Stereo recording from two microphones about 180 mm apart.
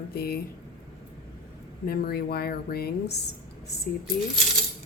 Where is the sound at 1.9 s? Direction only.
60° left (ahead or behind).